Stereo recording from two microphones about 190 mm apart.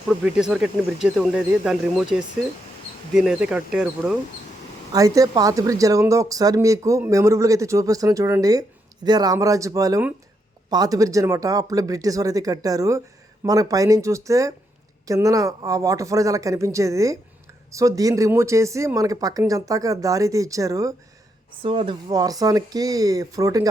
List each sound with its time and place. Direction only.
0.3 s speech: 5° right (ahead or behind)
4.9 s speech: 20° right (ahead or behind)